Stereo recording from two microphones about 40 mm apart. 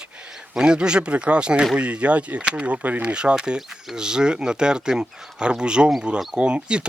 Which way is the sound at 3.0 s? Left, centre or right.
Right.